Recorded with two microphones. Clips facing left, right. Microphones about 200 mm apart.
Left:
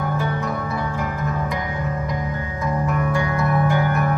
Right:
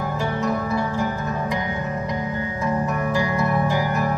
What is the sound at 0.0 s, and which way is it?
Music, 25° right (ahead or behind).